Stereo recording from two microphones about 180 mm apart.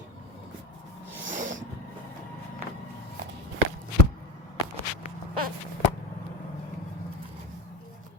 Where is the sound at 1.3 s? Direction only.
45° right (ahead or behind).